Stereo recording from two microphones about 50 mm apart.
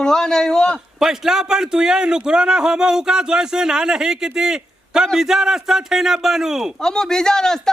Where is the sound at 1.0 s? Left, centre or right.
Centre.